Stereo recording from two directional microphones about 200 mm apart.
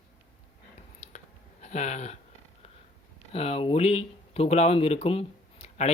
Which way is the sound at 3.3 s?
30° left (ahead or behind).